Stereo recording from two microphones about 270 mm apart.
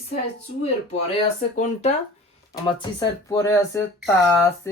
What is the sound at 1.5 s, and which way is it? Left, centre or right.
Speech, left.